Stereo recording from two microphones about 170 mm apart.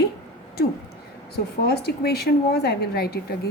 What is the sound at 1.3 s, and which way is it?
Speech, 70° left (ahead or behind).